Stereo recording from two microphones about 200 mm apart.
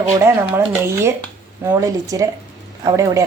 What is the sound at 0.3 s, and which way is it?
A woman's voice, 10° right (ahead or behind).